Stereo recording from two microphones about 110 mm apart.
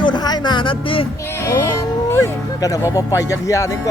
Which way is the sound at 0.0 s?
40° left (ahead or behind).